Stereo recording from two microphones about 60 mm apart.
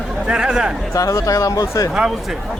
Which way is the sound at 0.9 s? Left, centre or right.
Left.